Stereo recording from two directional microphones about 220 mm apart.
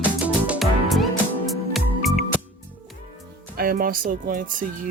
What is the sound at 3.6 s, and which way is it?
Speech, 40° right (ahead or behind).